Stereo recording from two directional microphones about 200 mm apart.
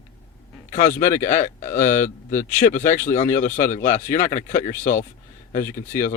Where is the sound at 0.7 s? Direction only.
40° left (ahead or behind).